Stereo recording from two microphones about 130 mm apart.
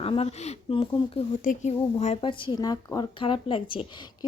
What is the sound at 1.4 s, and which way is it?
Speech, 90° left.